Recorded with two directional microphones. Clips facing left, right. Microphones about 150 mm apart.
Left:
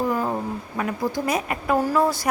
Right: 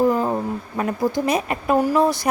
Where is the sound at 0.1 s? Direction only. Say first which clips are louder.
Right 4 dB; 25° right (ahead or behind).